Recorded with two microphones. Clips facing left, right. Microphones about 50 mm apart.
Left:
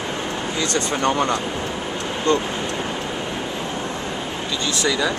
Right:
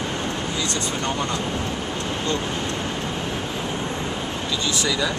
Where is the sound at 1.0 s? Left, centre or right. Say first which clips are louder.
Left 8 dB; left.